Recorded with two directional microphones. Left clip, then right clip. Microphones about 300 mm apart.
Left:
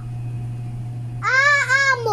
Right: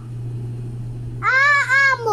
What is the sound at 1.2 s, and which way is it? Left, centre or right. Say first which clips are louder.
Babbling: right 1 dB; centre.